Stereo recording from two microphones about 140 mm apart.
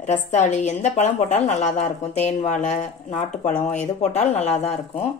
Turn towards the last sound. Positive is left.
turn(degrees=45)  # may be behind; listen again after turning